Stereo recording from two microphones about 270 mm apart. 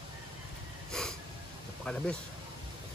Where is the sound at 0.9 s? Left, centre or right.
Centre.